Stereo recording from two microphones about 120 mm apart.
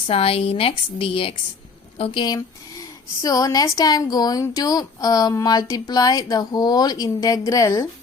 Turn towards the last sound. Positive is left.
turn(degrees=25)  # may be behind; listen again after turning